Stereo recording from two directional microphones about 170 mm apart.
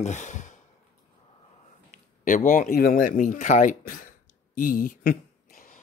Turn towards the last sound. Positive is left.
turn(degrees=50)  # may be behind; listen again after turning